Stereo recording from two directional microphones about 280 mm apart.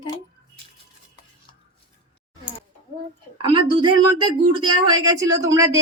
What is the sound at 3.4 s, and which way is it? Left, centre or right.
Speech, centre.